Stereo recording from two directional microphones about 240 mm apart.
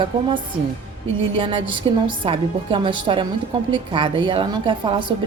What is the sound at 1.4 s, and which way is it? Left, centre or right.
A woman's voice, centre.